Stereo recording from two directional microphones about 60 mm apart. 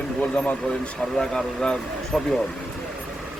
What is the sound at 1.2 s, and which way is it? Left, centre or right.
Speech, centre.